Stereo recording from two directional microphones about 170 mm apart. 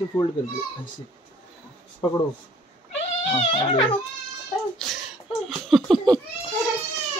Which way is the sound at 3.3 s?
30° left (ahead or behind).